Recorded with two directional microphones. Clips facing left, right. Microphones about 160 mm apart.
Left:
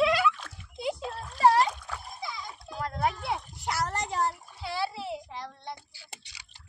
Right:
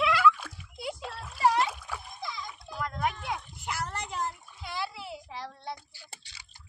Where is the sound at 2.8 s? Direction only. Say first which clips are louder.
Left 2 dB; 35° left (ahead or behind).